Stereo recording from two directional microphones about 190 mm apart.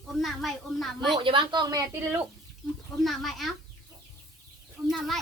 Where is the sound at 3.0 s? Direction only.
Centre (ahead or behind).